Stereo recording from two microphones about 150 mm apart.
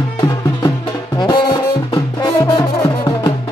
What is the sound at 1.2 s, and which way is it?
Music, 30° left (ahead or behind).